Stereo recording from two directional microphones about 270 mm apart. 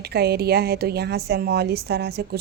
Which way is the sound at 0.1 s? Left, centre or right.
Right.